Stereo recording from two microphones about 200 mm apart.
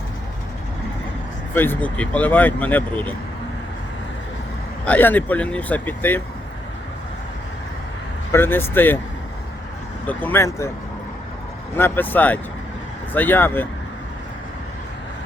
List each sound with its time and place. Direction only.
1.5 s speech: 10° left (ahead or behind)
4.9 s speech: 10° left (ahead or behind)
8.3 s speech: 10° left (ahead or behind)
10.1 s speech: 10° left (ahead or behind)
11.8 s speech: 10° left (ahead or behind)